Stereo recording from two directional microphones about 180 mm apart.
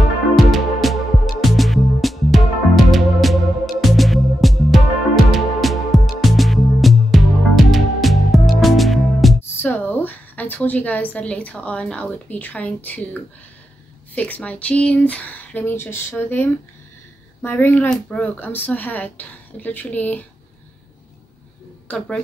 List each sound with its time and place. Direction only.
0.4 s music: centre (ahead or behind)
9.6 s a woman's voice: 10° left (ahead or behind)
21.8 s speech: 5° left (ahead or behind)